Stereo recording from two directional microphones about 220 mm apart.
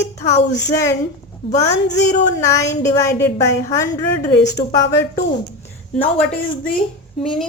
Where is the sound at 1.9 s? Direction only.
50° left (ahead or behind).